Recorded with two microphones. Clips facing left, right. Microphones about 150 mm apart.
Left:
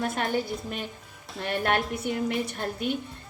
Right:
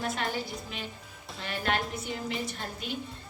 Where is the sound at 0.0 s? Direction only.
50° left (ahead or behind).